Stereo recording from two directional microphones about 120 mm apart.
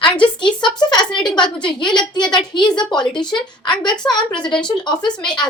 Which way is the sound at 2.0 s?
5° left (ahead or behind).